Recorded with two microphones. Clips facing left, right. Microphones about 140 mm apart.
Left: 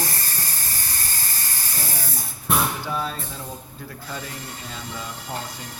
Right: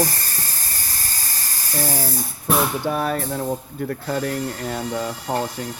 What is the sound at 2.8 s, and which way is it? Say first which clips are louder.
Speech: right 6 dB; 60° right (ahead or behind).